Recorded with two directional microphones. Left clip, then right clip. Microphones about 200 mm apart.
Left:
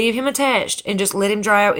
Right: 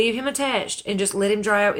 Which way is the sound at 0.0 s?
35° left (ahead or behind).